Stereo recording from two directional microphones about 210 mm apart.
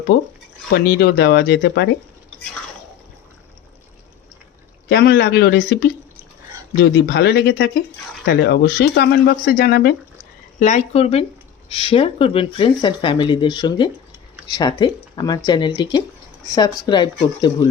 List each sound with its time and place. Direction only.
0.1 s speech: 50° left (ahead or behind)
4.9 s speech: 50° left (ahead or behind)
10.6 s speech: 35° left (ahead or behind)